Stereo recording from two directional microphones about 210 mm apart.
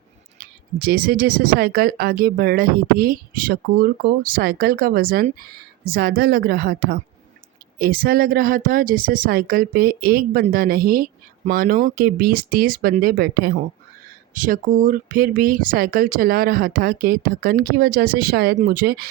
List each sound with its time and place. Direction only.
0.3 s speech: 45° right (ahead or behind)